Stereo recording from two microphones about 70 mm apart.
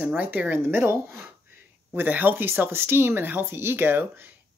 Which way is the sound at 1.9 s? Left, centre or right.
Right.